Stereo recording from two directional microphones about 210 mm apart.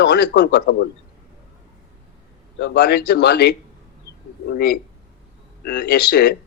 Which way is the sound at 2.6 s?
55° left (ahead or behind).